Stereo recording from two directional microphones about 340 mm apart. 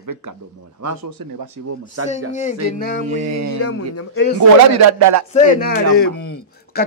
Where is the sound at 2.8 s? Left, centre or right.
Left.